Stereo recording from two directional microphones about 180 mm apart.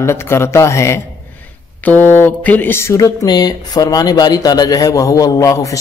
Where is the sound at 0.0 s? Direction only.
15° left (ahead or behind).